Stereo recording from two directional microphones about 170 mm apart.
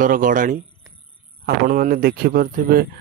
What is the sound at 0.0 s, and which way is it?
A man's voice, 50° right (ahead or behind).